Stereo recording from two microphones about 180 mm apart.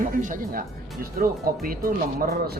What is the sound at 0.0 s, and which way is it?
Speech, 45° right (ahead or behind).